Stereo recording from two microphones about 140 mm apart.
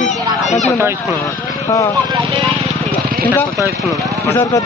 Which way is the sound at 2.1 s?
35° right (ahead or behind).